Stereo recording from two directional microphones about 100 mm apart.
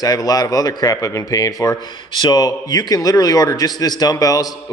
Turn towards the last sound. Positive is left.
turn(degrees=40)  # may be behind; listen again after turning